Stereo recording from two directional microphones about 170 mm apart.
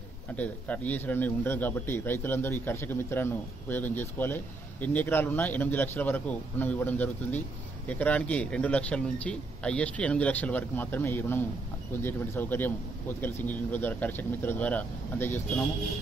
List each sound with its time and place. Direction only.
0.4 s speech: 10° left (ahead or behind)